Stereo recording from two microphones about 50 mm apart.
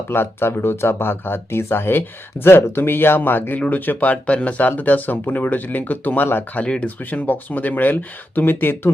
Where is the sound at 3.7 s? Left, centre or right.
Left.